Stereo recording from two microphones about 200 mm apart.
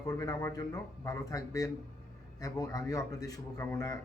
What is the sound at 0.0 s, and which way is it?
Speech, 15° left (ahead or behind).